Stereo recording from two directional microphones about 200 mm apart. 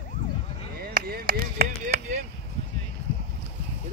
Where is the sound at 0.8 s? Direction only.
50° right (ahead or behind).